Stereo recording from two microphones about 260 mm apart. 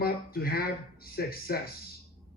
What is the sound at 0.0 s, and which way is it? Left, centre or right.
Speech, left.